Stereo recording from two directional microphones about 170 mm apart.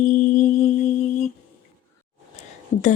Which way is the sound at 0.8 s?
45° left (ahead or behind).